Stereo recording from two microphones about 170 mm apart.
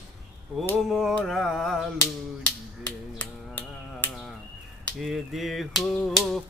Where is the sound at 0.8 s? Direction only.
Centre (ahead or behind).